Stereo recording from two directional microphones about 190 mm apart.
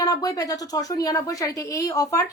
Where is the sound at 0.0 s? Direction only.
20° left (ahead or behind).